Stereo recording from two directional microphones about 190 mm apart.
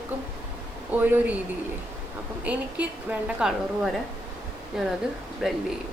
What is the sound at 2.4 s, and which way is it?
A woman's voice, 5° right (ahead or behind).